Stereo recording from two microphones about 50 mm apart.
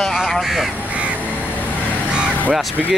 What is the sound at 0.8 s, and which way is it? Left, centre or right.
Crow, right.